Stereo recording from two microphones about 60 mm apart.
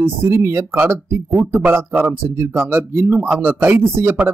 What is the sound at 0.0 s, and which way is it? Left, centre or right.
Speech, right.